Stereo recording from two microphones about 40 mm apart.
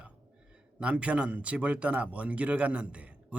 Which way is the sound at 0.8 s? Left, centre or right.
Right.